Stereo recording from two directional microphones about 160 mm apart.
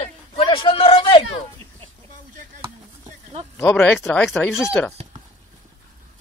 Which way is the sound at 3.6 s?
5° left (ahead or behind).